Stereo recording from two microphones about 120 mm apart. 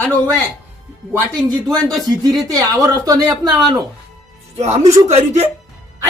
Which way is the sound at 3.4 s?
5° left (ahead or behind).